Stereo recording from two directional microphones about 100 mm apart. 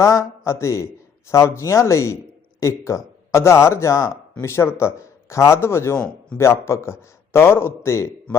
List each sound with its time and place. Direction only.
0.0 s speech: 35° left (ahead or behind)